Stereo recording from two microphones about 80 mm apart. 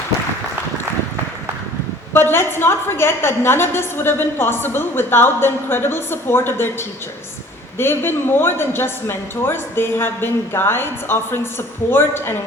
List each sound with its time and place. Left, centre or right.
2.1 s a woman's voice: left